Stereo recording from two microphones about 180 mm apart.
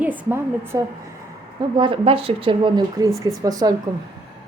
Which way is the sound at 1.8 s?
30° right (ahead or behind).